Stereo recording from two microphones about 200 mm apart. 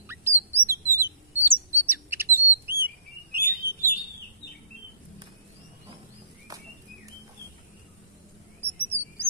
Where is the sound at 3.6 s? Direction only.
50° right (ahead or behind).